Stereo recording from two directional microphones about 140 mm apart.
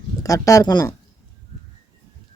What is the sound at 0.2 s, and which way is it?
Speech, 25° left (ahead or behind).